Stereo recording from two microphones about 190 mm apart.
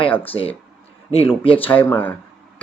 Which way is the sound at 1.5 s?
10° left (ahead or behind).